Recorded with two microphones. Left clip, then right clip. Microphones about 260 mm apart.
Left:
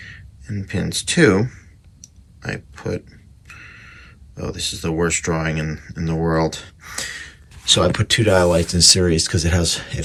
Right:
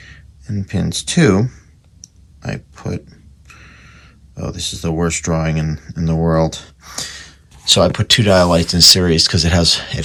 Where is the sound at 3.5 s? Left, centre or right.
Centre.